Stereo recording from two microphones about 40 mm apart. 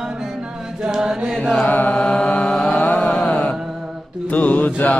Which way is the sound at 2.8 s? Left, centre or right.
Left.